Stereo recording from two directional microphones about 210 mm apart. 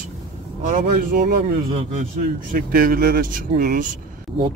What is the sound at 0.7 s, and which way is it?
Speech, 50° right (ahead or behind).